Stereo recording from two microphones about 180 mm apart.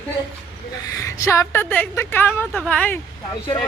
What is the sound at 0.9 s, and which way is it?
A woman's voice, 15° left (ahead or behind).